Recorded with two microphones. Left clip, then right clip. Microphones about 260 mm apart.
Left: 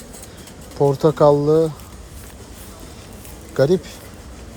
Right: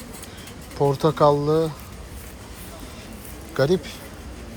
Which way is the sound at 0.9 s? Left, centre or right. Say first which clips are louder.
Left 4 dB; centre.